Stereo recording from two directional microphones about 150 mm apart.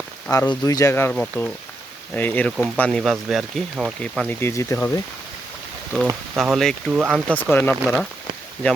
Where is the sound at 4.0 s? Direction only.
10° left (ahead or behind).